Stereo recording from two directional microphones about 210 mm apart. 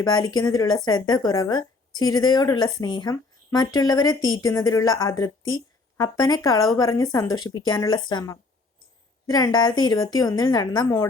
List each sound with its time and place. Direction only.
0.2 s a woman's voice: 20° left (ahead or behind)